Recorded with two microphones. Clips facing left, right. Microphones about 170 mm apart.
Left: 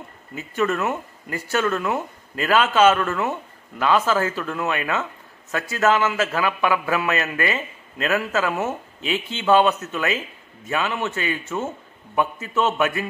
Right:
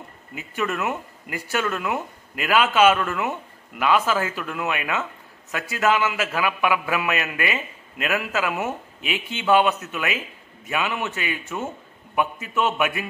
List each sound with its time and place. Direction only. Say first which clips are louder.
0.3 s speech: left 4 dB; 35° left (ahead or behind)
0.7 s a man's voice: left 3 dB; 15° right (ahead or behind)